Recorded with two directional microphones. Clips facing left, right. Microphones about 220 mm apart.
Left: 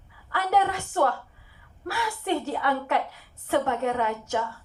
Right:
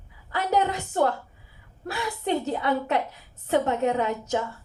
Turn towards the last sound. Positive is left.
turn(degrees=-20)  # may be behind; listen again after turning